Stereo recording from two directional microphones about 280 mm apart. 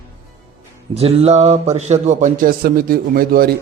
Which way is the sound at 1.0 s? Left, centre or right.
Right.